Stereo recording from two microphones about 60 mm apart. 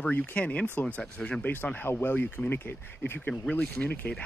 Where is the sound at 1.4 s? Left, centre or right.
Left.